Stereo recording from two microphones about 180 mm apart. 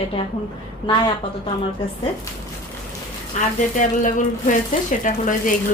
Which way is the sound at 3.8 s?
45° left (ahead or behind).